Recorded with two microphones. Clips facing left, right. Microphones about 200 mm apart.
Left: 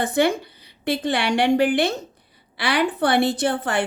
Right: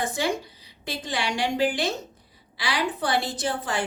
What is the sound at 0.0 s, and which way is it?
A woman's voice, 60° left (ahead or behind).